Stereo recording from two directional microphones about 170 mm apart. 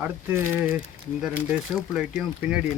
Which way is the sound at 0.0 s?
10° right (ahead or behind).